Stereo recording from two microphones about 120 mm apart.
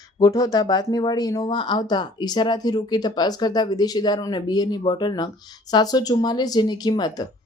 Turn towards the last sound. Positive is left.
turn(degrees=35)  # may be behind; listen again after turning